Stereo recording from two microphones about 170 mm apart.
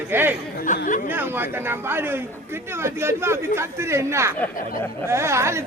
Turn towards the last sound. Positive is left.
turn(degrees=-15)  # may be behind; listen again after turning